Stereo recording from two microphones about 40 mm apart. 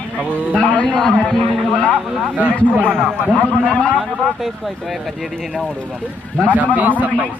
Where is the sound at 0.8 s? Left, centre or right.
Centre.